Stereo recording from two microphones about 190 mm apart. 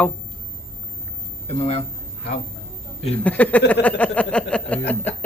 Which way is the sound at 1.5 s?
30° left (ahead or behind).